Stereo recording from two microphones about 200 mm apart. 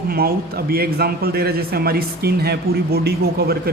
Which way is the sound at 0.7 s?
50° right (ahead or behind).